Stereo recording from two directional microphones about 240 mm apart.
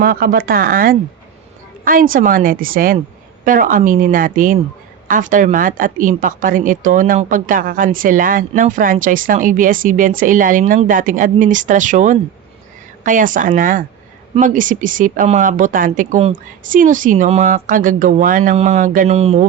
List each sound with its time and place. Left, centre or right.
0.0 s a woman's voice: right